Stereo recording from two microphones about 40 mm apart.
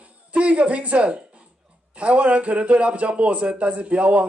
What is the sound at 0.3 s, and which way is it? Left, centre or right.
A man's voice, right.